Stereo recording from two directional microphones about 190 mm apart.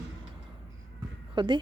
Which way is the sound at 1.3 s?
25° right (ahead or behind).